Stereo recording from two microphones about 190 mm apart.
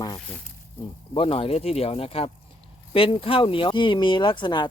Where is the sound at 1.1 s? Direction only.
30° left (ahead or behind).